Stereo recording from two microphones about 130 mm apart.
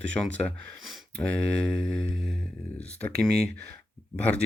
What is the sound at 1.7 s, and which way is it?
Speech, 5° left (ahead or behind).